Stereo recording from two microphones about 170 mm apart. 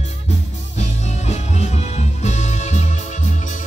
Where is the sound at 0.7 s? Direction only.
40° left (ahead or behind).